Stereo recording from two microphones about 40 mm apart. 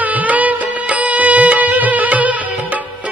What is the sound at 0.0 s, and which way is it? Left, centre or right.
Music, right.